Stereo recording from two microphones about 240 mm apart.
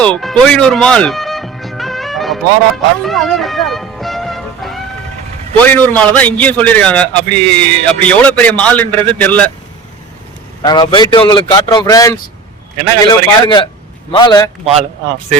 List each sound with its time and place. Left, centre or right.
0.0 s music: centre
5.5 s a man's voice: centre
10.6 s a man's voice: centre